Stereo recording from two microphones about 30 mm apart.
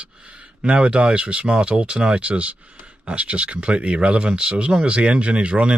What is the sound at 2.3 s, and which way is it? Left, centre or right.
Speech, right.